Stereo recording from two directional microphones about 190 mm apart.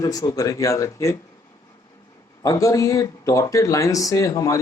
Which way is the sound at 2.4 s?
15° left (ahead or behind).